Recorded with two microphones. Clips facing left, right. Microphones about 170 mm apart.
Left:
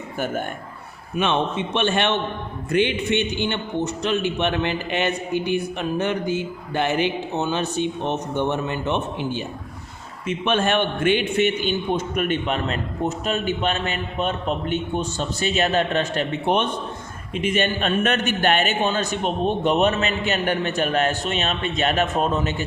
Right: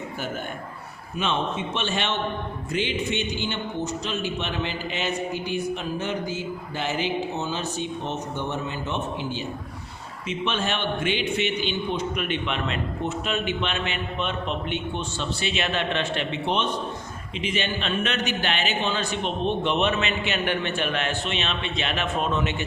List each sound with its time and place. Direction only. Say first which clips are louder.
1.2 s a man's voice: left 4 dB; 60° left (ahead or behind); by 22.6 s 40° left (ahead or behind)